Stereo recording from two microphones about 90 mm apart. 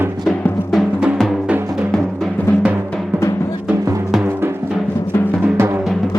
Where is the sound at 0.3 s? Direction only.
20° left (ahead or behind).